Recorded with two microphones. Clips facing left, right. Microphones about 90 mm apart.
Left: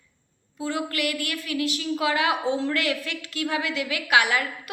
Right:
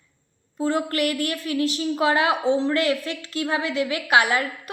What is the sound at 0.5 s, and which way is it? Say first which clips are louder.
A woman's voice: right 5 dB; 40° right (ahead or behind).